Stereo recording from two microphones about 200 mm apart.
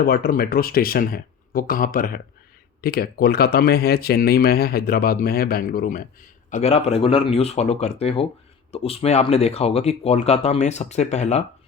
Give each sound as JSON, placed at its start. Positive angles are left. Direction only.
{"t": 0.0, "sound": "speech", "side_deg": 50}